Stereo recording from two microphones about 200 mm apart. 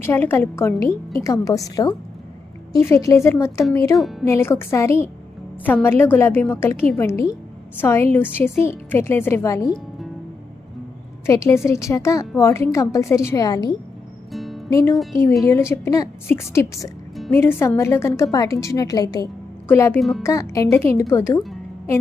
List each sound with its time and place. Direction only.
0.0 s a woman's voice: 10° left (ahead or behind)
3.9 s speech: centre (ahead or behind)
4.3 s a woman's voice: 10° left (ahead or behind)
11.3 s a woman's voice: 15° left (ahead or behind)
14.3 s music: centre (ahead or behind)
14.7 s a woman's voice: 15° left (ahead or behind)
20.0 s speech: centre (ahead or behind)
20.2 s a woman's voice: 15° left (ahead or behind)